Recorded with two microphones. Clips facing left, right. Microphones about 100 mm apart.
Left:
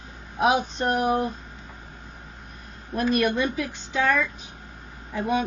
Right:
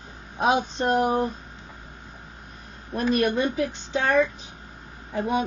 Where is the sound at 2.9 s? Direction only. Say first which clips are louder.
Even; 30° right (ahead or behind).